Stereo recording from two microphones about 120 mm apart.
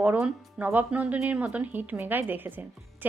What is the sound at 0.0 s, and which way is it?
A woman's voice, 15° right (ahead or behind).